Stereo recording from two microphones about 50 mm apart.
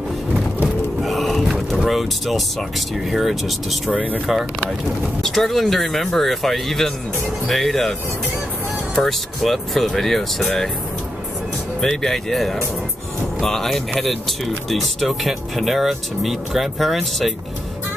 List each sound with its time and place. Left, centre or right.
0.7 s music: centre
1.8 s speech: centre
3.9 s speech: right
5.2 s speech: centre
8.9 s speech: centre
11.8 s speech: centre